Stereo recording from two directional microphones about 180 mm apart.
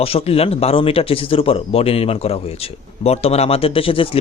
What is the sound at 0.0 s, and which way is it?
Speech, 35° left (ahead or behind).